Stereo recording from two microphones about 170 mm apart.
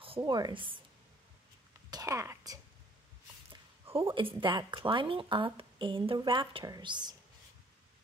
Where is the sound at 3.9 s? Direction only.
35° right (ahead or behind).